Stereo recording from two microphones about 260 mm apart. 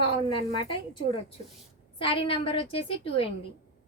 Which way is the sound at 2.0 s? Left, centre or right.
Left.